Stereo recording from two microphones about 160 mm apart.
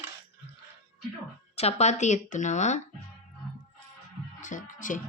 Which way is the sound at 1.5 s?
40° left (ahead or behind).